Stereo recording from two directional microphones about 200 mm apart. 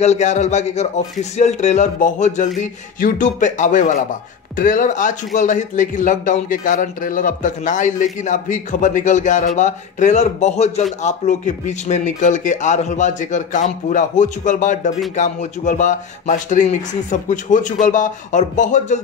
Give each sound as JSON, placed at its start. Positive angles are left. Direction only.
{"t": 0.0, "sound": "speech", "side_deg": 35}